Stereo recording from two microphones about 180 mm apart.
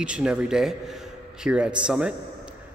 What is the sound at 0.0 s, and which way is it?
A man's voice, 5° right (ahead or behind).